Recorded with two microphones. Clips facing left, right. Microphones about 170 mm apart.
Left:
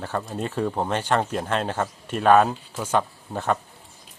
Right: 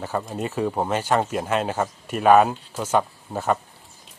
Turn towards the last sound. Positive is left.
turn(degrees=-5)  # may be behind; listen again after turning